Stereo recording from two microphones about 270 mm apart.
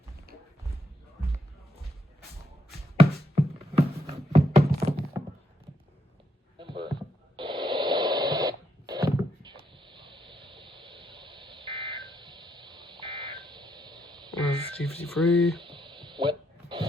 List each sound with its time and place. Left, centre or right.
3.0 s music: right
6.6 s a sound: centre
7.3 s radio: centre
14.8 s speech: centre
15.6 s music: centre